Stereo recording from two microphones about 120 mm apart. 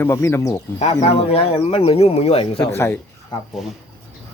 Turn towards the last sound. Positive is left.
turn(degrees=0)  # may be behind; listen again after turning